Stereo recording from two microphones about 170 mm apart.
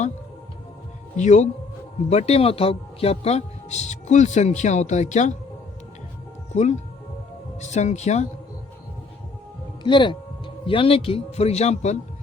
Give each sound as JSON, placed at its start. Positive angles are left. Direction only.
{"t": 1.1, "sound": "speech", "side_deg": 45}
{"t": 6.5, "sound": "speech", "side_deg": 45}
{"t": 9.8, "sound": "speech", "side_deg": 30}